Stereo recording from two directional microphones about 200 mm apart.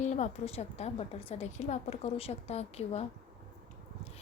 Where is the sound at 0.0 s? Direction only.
35° left (ahead or behind).